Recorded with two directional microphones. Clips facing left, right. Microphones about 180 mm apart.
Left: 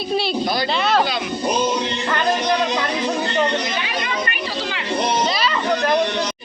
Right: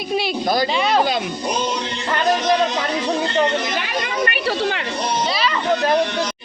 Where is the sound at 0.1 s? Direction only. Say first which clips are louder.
Even; 10° right (ahead or behind).